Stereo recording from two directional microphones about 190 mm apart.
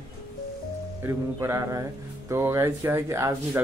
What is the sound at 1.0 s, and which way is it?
Speech, 15° right (ahead or behind).